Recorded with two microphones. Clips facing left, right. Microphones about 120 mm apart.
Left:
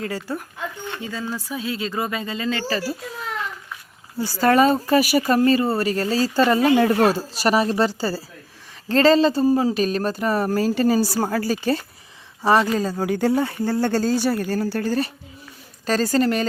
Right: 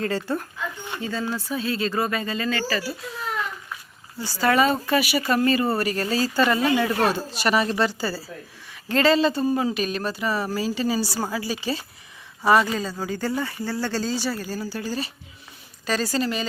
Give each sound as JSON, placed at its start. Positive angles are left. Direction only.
{"t": 0.0, "sound": "speech", "side_deg": 10}
{"t": 4.2, "sound": "speech", "side_deg": 45}
{"t": 5.4, "sound": "speech", "side_deg": 25}
{"t": 12.5, "sound": "speech", "side_deg": 0}
{"t": 12.8, "sound": "speech", "side_deg": 50}
{"t": 13.1, "sound": "speech", "side_deg": 65}
{"t": 15.9, "sound": "speech", "side_deg": 45}